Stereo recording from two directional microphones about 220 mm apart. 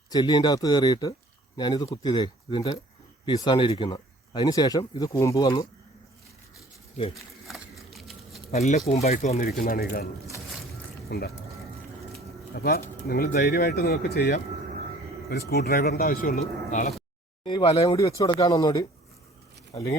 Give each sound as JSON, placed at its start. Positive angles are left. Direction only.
{"t": 0.1, "sound": "speech", "side_deg": 20}
{"t": 7.1, "sound": "a sound", "side_deg": 0}
{"t": 8.5, "sound": "speech", "side_deg": 30}
{"t": 11.1, "sound": "speech", "side_deg": 50}
{"t": 12.5, "sound": "speech", "side_deg": 45}
{"t": 17.4, "sound": "speech", "side_deg": 20}